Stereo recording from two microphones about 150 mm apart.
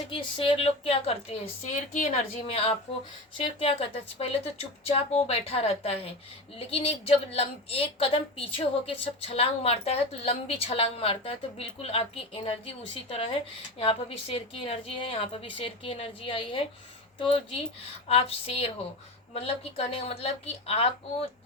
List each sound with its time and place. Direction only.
0.1 s a woman's voice: 35° left (ahead or behind)